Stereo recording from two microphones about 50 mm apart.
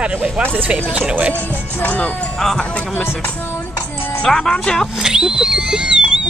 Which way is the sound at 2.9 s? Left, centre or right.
Left.